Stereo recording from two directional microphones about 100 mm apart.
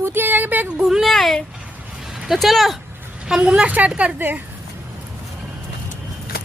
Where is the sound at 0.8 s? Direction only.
Centre (ahead or behind); by 4.4 s 15° right (ahead or behind).